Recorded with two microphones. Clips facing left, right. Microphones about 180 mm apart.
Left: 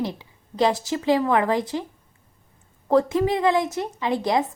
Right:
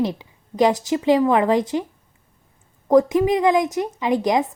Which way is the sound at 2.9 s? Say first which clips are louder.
Right 4 dB; 15° right (ahead or behind).